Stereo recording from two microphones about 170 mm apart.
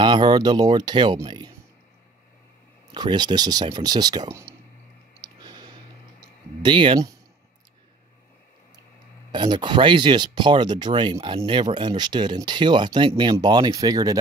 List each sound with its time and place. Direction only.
0.0 s speech: 25° right (ahead or behind)
2.9 s speech: 25° right (ahead or behind)
5.2 s a sound: 25° right (ahead or behind)
6.6 s speech: 30° right (ahead or behind)
9.3 s speech: 25° right (ahead or behind)